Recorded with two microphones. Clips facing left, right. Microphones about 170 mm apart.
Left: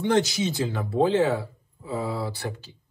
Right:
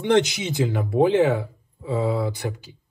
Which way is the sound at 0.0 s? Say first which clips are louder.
Right 3 dB; 20° right (ahead or behind).